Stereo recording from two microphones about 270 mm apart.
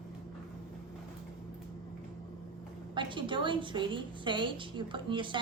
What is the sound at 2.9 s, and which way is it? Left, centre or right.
A woman's voice, centre.